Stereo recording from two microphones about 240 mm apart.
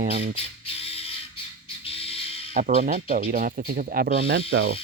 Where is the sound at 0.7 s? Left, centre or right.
Left.